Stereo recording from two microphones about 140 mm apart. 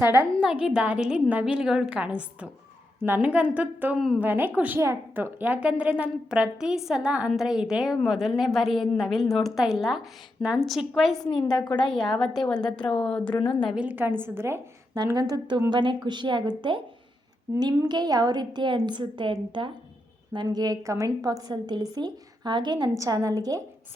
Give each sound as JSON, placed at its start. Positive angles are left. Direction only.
{"t": 0.0, "sound": "a woman's voice", "side_deg": -15}
{"t": 0.4, "sound": "a woman's voice", "side_deg": -5}
{"t": 11.3, "sound": "a woman's voice", "side_deg": 30}
{"t": 11.9, "sound": "a woman's voice", "side_deg": 0}
{"t": 13.7, "sound": "a woman's voice", "side_deg": -10}
{"t": 14.9, "sound": "a woman's voice", "side_deg": -30}